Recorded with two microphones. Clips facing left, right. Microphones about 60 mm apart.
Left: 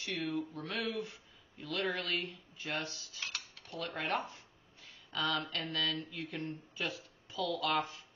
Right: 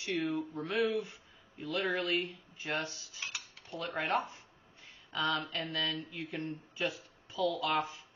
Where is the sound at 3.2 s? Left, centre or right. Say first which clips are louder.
Right 1 dB; centre.